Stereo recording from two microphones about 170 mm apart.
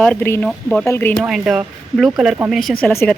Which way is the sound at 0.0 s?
10° left (ahead or behind).